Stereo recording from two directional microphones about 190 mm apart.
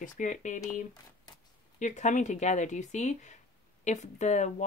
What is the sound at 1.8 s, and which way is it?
Speech, 40° left (ahead or behind).